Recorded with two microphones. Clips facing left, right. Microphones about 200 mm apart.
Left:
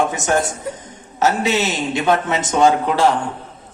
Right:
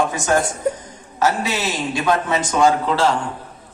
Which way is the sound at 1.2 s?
20° left (ahead or behind).